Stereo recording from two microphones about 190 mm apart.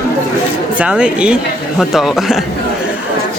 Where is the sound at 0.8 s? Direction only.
5° right (ahead or behind).